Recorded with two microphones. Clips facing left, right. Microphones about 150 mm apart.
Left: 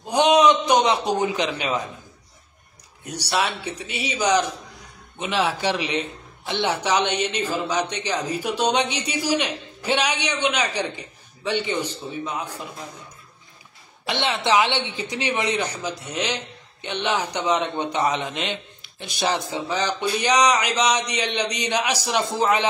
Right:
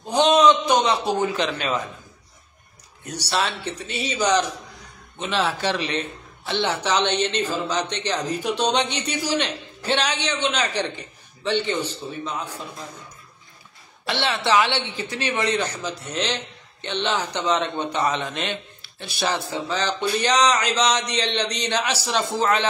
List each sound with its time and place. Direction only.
0.0 s a man's voice: 10° left (ahead or behind)
3.1 s a man's voice: 10° left (ahead or behind)
14.0 s a man's voice: 15° left (ahead or behind)